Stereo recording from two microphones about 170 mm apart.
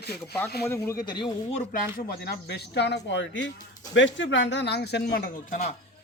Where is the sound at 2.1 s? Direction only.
70° left (ahead or behind).